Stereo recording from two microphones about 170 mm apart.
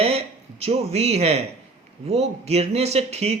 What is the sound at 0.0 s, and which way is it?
A man's voice, 35° right (ahead or behind).